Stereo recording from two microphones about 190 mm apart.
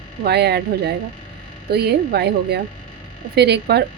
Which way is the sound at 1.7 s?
60° right (ahead or behind).